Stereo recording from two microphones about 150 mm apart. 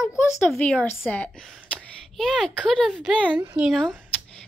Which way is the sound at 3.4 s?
10° right (ahead or behind).